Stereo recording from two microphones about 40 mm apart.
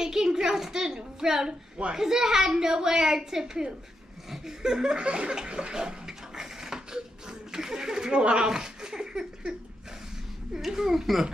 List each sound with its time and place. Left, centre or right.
0.0 s a woman's voice: centre
5.0 s laughter: right
5.3 s bathtub: right
8.2 s speech: right
8.5 s a sound: centre
10.5 s a woman's voice: centre